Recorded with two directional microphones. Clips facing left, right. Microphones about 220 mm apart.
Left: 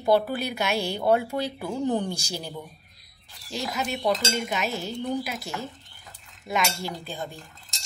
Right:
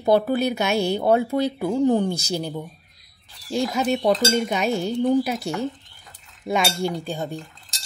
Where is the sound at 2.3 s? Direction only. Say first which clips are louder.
Right 8 dB; 50° right (ahead or behind).